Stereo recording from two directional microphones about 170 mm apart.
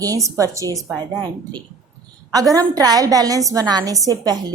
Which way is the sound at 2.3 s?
20° right (ahead or behind).